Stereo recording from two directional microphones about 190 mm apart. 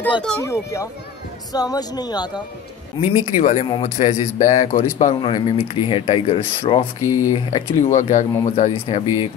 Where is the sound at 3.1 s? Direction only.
35° left (ahead or behind).